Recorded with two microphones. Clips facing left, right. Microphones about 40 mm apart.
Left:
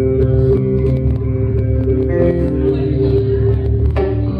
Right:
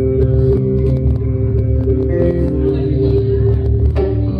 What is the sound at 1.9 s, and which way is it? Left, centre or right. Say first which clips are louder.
Music: left 1 dB; left.